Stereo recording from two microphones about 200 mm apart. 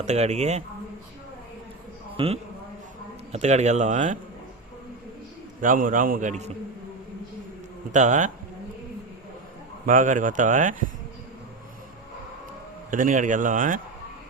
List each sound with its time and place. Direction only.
0.0 s speech: 35° right (ahead or behind)
2.1 s a man's voice: 30° right (ahead or behind)
5.5 s speech: 40° right (ahead or behind)
7.9 s speech: 40° right (ahead or behind)
9.8 s speech: 40° right (ahead or behind)
12.9 s speech: 40° right (ahead or behind)